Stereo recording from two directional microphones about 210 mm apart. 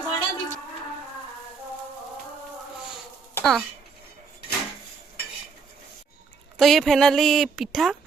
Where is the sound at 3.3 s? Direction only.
Centre (ahead or behind).